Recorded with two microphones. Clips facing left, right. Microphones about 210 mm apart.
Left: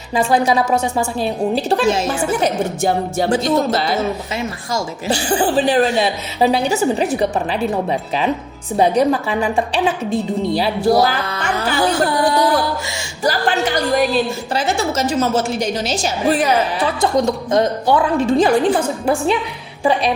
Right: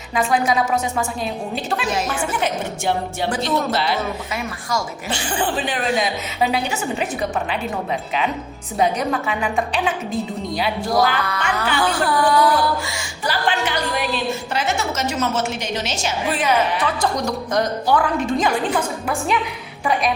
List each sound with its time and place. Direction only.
0.1 s a woman's voice: 30° left (ahead or behind)
2.8 s a woman's voice: 40° left (ahead or behind)
4.4 s a woman's voice: 25° left (ahead or behind)
11.2 s music: 25° left (ahead or behind)
11.6 s a woman's voice: 40° left (ahead or behind)
12.2 s music: 25° left (ahead or behind)
13.2 s a woman's voice: 40° left (ahead or behind)